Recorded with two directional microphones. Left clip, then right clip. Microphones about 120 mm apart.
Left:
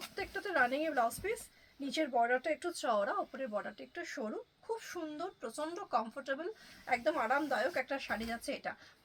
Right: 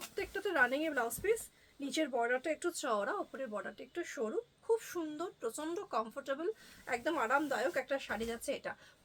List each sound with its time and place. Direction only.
0.2 s speech: 40° right (ahead or behind)